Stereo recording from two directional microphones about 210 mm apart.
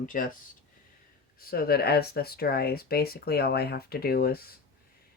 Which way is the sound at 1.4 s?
45° left (ahead or behind).